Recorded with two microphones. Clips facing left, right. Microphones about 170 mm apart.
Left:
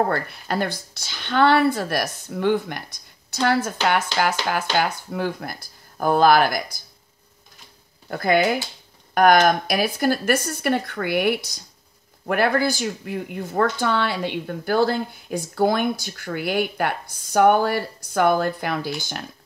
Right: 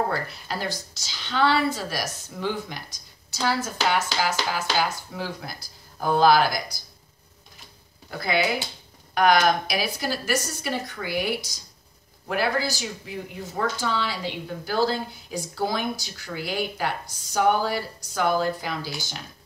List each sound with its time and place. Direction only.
0.1 s speech: 55° left (ahead or behind)
8.1 s speech: 50° left (ahead or behind)